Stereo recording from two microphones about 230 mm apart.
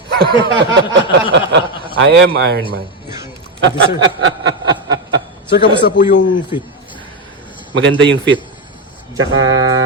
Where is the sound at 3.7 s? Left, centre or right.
Right.